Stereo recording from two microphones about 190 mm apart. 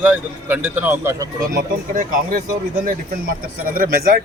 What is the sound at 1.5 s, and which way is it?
Speech, 45° right (ahead or behind).